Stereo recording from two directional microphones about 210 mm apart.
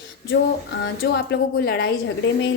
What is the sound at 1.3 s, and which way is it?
Speech, 50° left (ahead or behind).